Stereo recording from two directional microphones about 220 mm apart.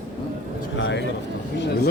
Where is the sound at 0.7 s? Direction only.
55° left (ahead or behind).